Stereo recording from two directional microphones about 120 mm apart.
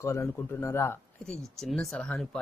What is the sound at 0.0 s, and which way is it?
Speech, 25° left (ahead or behind).